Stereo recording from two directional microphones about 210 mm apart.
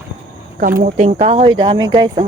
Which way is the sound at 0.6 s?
40° right (ahead or behind).